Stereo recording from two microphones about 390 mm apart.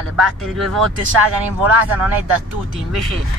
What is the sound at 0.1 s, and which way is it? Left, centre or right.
Speech, centre.